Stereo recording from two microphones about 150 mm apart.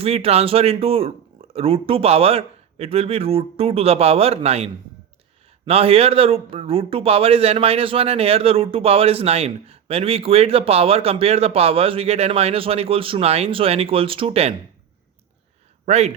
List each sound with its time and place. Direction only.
0.0 s speech: 40° right (ahead or behind)
15.9 s speech: 45° right (ahead or behind)